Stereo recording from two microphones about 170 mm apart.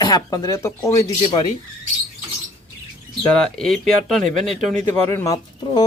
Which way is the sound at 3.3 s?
5° left (ahead or behind).